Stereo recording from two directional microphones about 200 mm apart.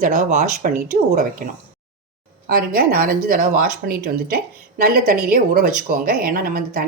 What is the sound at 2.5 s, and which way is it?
Speech, 45° right (ahead or behind).